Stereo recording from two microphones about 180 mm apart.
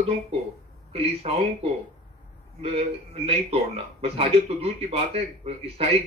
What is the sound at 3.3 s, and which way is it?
Speech, 35° right (ahead or behind).